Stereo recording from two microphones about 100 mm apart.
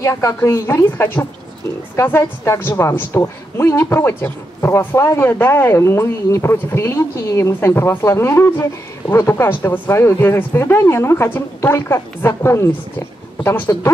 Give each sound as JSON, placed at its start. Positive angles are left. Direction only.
{"t": 0.0, "sound": "a woman's voice", "side_deg": 30}